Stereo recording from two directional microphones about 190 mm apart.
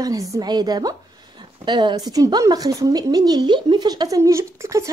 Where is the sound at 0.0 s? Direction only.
20° right (ahead or behind).